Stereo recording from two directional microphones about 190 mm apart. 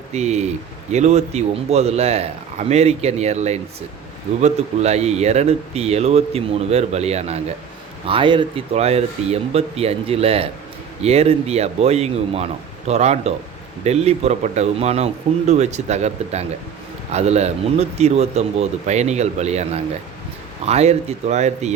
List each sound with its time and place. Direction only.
0.1 s speech: 35° right (ahead or behind)